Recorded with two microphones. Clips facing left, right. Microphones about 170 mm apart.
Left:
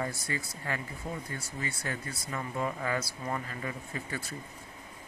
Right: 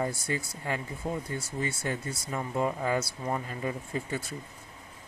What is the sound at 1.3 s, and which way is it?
Speech, 25° right (ahead or behind).